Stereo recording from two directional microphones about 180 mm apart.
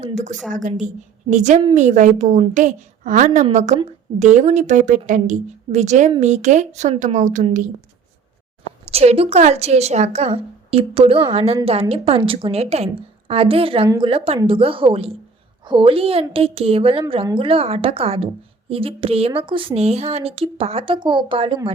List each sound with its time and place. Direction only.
0.0 s a woman's voice: 40° right (ahead or behind)
8.8 s a woman's voice: 35° right (ahead or behind)